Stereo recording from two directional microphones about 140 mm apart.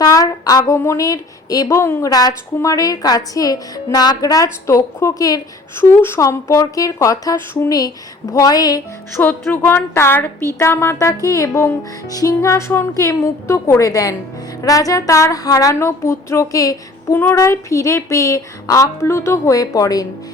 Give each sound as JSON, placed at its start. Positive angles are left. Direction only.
{"t": 0.0, "sound": "a woman's voice", "side_deg": 25}
{"t": 9.2, "sound": "a woman's voice", "side_deg": 15}